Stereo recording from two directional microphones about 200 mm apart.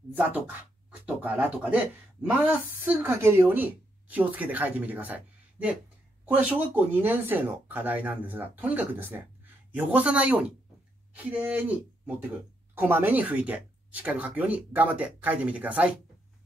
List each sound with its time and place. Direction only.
0.1 s speech: 10° right (ahead or behind)
12.7 s speech: 10° right (ahead or behind)